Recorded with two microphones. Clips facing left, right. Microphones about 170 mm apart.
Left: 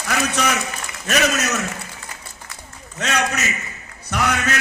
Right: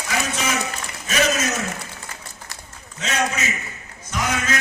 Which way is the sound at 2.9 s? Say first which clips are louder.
Left 2 dB; 70° left (ahead or behind).